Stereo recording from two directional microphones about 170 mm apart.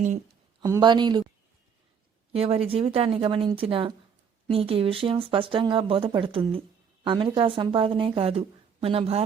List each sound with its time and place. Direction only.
0.6 s speech: 25° right (ahead or behind)
2.3 s a woman's voice: 35° right (ahead or behind)